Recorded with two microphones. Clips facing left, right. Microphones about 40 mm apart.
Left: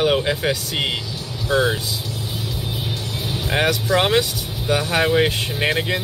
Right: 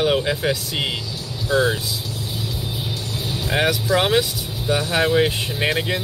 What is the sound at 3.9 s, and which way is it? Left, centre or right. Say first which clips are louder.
Speech: left 1 dB; centre.